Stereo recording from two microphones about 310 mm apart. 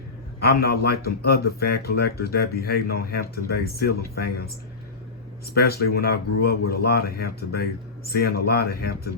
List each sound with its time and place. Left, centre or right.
0.3 s speech: left
5.5 s speech: left